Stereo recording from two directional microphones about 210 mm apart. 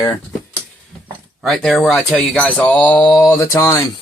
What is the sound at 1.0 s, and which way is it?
Speech, centre (ahead or behind).